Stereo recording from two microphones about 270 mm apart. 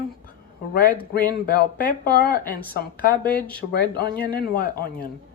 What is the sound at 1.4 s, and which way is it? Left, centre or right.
Speech, left.